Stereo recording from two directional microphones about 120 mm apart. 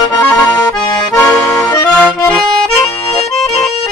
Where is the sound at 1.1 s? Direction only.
25° left (ahead or behind).